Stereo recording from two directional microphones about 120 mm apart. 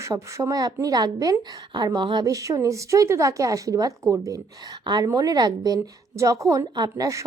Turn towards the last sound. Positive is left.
turn(degrees=-30)  # may be behind; listen again after turning